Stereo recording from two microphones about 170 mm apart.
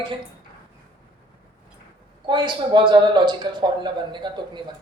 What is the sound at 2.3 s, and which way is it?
Speech, 30° right (ahead or behind).